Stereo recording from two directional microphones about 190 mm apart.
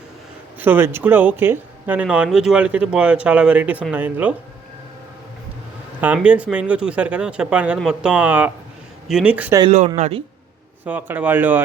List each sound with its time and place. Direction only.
0.6 s speech: 10° right (ahead or behind)
6.0 s speech: 5° right (ahead or behind)
9.7 s speech: 35° right (ahead or behind)
10.8 s speech: 5° right (ahead or behind)